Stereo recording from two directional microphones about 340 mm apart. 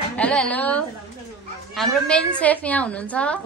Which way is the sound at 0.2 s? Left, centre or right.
Centre.